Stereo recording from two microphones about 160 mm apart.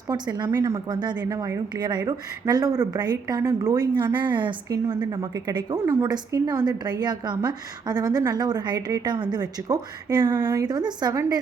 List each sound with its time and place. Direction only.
0.1 s speech: 25° right (ahead or behind)